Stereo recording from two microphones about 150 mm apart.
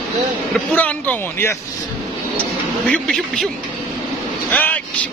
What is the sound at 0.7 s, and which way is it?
Speech, 10° left (ahead or behind).